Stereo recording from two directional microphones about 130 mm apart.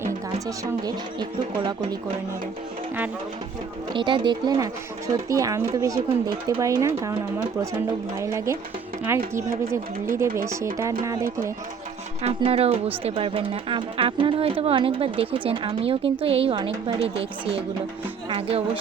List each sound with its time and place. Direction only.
0.3 s speech: 25° right (ahead or behind)
3.9 s speech: 40° right (ahead or behind); by 7.2 s 20° right (ahead or behind)
8.2 s speech: 20° right (ahead or behind)
12.2 s speech: 45° right (ahead or behind)
18.3 s speech: 45° right (ahead or behind)